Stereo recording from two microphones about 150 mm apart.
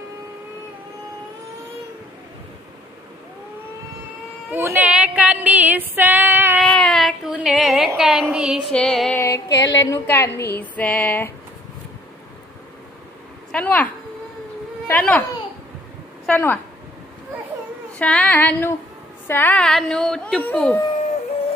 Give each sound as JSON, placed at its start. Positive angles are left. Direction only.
{"t": 4.5, "sound": "a sound", "side_deg": -15}
{"t": 6.6, "sound": "speech", "side_deg": 5}
{"t": 8.7, "sound": "a woman's voice", "side_deg": 5}
{"t": 9.2, "sound": "a sound", "side_deg": 20}
{"t": 10.6, "sound": "female singing", "side_deg": 10}
{"t": 13.5, "sound": "female singing", "side_deg": 10}
{"t": 16.3, "sound": "a woman's voice", "side_deg": 10}
{"t": 17.9, "sound": "female singing", "side_deg": 10}
{"t": 19.2, "sound": "a woman's voice", "side_deg": 15}